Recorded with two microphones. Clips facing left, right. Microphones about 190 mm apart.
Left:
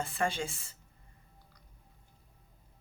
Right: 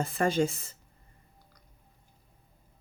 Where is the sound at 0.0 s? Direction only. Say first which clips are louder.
Right 7 dB; 40° right (ahead or behind).